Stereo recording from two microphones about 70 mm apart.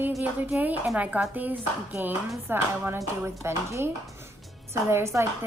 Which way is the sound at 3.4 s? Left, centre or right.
Right.